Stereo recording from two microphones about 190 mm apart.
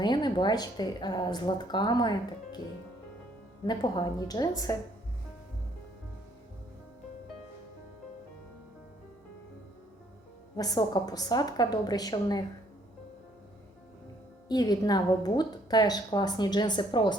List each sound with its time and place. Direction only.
0.0 s a woman's voice: 25° left (ahead or behind)
3.7 s a woman's voice: 20° left (ahead or behind)
10.6 s a woman's voice: 20° left (ahead or behind)
14.4 s a woman's voice: 20° left (ahead or behind)